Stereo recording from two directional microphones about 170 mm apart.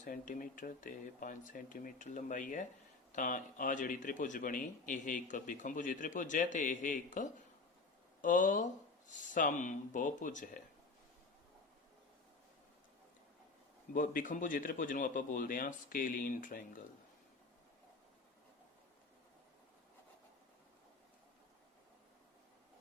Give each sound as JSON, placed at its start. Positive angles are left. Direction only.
{"t": 0.0, "sound": "speech", "side_deg": 50}
{"t": 13.9, "sound": "speech", "side_deg": 55}